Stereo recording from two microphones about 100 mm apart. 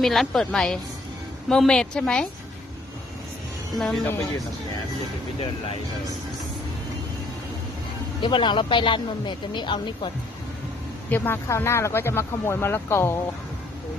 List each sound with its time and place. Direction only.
0.0 s a woman's voice: 5° left (ahead or behind)
3.8 s a woman's voice: centre (ahead or behind)
4.0 s speech: 25° left (ahead or behind)
8.2 s speech: 55° left (ahead or behind)
11.1 s speech: 25° left (ahead or behind)